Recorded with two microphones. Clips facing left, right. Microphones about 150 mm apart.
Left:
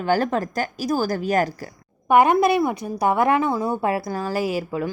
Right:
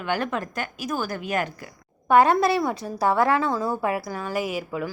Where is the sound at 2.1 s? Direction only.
15° left (ahead or behind).